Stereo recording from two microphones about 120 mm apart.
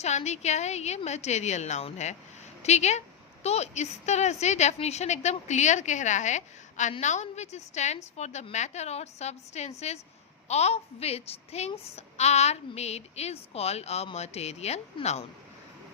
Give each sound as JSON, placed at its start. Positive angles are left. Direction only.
{"t": 0.0, "sound": "a woman's voice", "side_deg": 70}